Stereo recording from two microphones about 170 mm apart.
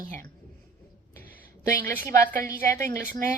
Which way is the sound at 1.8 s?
50° right (ahead or behind).